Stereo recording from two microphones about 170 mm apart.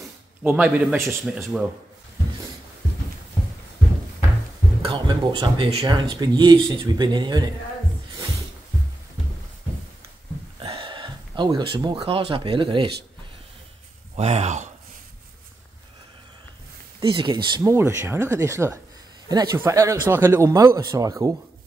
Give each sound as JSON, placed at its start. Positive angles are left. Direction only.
{"t": 0.4, "sound": "speech", "side_deg": -10}
{"t": 4.8, "sound": "speech", "side_deg": -25}
{"t": 10.6, "sound": "speech", "side_deg": -30}
{"t": 14.1, "sound": "speech", "side_deg": -40}
{"t": 17.0, "sound": "speech", "side_deg": -30}